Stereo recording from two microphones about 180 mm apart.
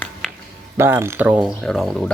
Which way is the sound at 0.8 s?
15° right (ahead or behind).